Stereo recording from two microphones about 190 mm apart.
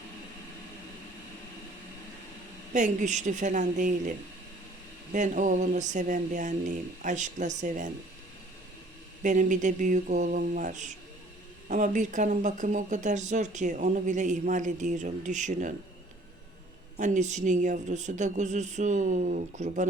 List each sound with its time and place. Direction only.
2.7 s speech: 40° right (ahead or behind)
5.1 s speech: 40° right (ahead or behind)
9.2 s speech: 40° right (ahead or behind)
17.0 s speech: 40° right (ahead or behind)